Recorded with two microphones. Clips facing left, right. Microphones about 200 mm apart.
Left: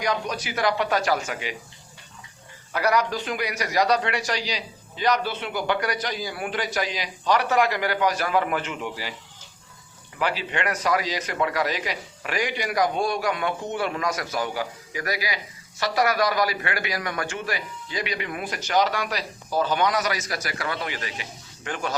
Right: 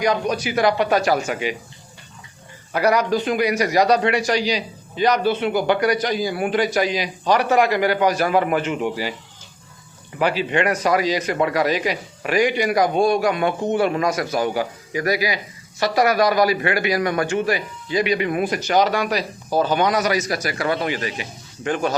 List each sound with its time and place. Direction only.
0.0 s a man's voice: 15° right (ahead or behind)
2.7 s a man's voice: 15° right (ahead or behind)
10.2 s a man's voice: 15° right (ahead or behind)
14.0 s a man's voice: 30° right (ahead or behind)
14.3 s a man's voice: 20° right (ahead or behind)